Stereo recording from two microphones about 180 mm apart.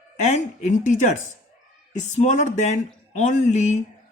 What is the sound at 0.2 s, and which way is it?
Speech, 40° left (ahead or behind).